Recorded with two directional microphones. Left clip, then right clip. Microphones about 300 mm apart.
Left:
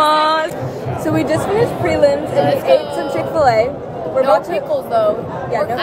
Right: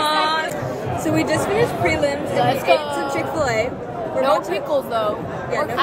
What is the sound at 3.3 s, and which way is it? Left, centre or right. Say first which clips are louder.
Speech: left 9 dB; centre.